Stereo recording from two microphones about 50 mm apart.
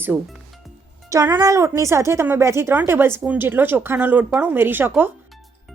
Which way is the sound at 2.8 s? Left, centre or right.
Right.